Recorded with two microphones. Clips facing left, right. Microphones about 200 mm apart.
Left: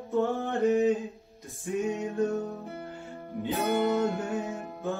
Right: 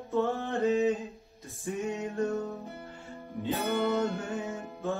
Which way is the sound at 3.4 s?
15° left (ahead or behind).